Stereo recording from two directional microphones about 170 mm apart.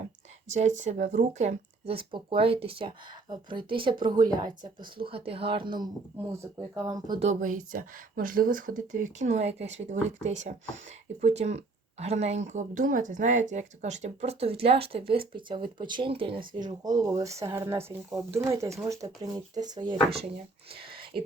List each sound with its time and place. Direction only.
0.8 s speech: 45° right (ahead or behind); by 7.2 s 20° right (ahead or behind)
7.2 s speech: 45° right (ahead or behind); by 20.1 s 25° right (ahead or behind)
20.8 s whispering: 30° right (ahead or behind)